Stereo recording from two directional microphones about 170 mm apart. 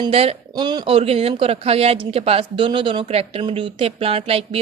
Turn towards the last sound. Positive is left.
turn(degrees=-35)  # may be behind; listen again after turning